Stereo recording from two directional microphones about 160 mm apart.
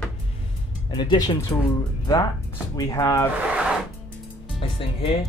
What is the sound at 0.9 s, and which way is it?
Speech, 30° left (ahead or behind).